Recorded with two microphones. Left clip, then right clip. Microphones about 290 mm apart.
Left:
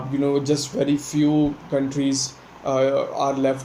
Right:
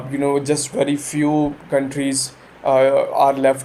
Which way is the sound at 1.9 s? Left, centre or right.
Centre.